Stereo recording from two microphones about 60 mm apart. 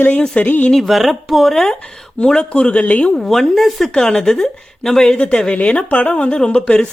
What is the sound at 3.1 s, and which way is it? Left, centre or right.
Speech, centre.